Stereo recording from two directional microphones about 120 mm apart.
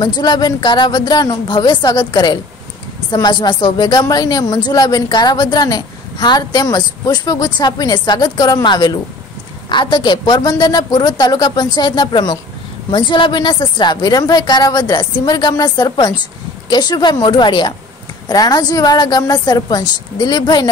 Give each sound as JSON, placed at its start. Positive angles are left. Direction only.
{"t": 0.0, "sound": "speech", "side_deg": 35}